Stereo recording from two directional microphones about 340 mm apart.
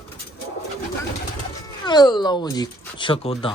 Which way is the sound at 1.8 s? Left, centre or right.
Centre.